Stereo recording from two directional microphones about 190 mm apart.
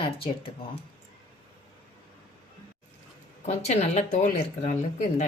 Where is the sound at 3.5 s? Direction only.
35° left (ahead or behind).